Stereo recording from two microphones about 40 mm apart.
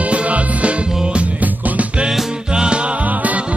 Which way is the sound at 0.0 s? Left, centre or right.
Right.